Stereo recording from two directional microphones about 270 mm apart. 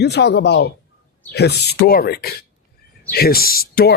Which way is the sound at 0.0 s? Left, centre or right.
Left.